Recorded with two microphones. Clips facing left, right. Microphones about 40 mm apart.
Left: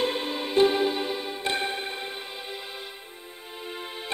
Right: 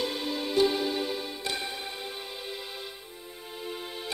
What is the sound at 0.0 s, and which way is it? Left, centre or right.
Music, left.